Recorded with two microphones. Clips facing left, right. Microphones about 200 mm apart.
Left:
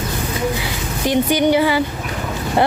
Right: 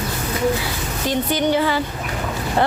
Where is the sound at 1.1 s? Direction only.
15° left (ahead or behind).